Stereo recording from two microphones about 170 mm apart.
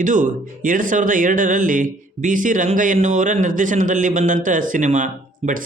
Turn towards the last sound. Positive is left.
turn(degrees=-45)  # may be behind; listen again after turning